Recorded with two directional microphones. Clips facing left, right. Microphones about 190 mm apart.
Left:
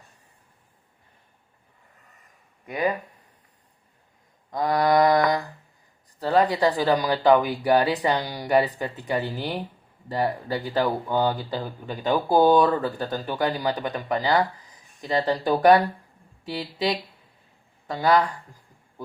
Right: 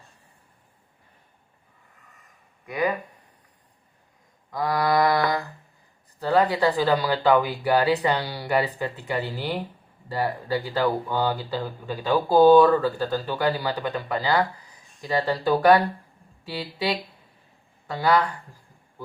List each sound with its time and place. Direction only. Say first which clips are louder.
4.5 s mantra: left 2 dB; 20° left (ahead or behind)
6.2 s speech: even; 15° left (ahead or behind)
17.9 s speech: left 1 dB; 15° left (ahead or behind)